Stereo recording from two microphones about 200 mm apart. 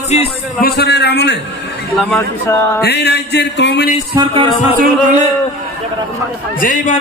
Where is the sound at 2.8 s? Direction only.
55° left (ahead or behind).